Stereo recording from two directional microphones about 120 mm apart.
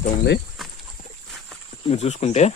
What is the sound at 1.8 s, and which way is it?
Speech, 60° left (ahead or behind).